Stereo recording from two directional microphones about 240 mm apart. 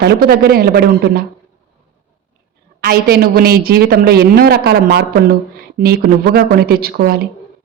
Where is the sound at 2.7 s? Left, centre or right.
Right.